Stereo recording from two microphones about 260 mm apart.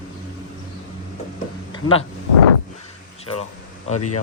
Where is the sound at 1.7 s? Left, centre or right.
Centre.